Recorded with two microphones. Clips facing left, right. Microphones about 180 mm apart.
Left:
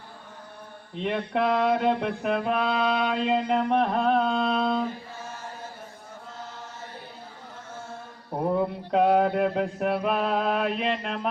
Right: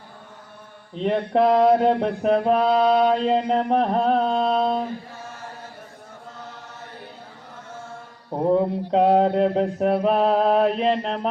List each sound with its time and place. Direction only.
0.9 s mantra: 35° right (ahead or behind)
8.4 s mantra: 25° right (ahead or behind)